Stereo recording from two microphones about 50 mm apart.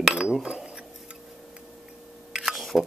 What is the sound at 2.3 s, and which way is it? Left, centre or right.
Camera, centre.